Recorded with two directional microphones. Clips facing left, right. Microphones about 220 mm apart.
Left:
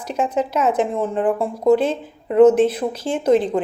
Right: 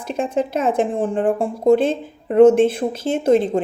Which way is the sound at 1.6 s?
25° right (ahead or behind).